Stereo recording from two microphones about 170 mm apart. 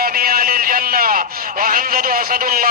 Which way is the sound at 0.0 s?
60° right (ahead or behind).